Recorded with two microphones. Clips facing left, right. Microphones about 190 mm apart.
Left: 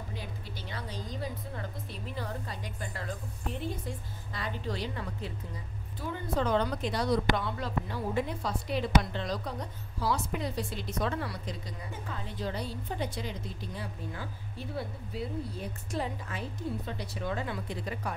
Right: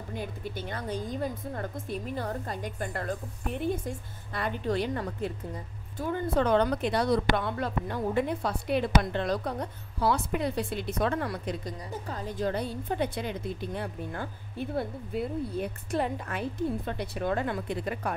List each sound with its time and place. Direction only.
0.1 s a woman's voice: 55° right (ahead or behind)